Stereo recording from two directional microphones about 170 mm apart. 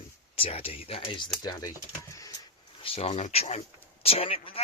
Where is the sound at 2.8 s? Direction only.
35° left (ahead or behind).